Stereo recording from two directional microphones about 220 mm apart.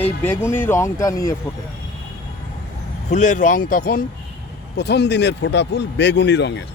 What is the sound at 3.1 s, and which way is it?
Speech, 35° left (ahead or behind).